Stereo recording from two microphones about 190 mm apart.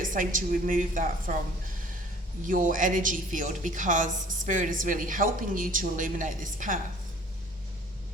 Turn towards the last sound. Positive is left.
turn(degrees=-45)  # may be behind; listen again after turning